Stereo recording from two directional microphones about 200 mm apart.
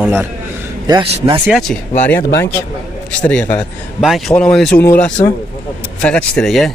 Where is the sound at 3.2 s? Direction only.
5° left (ahead or behind).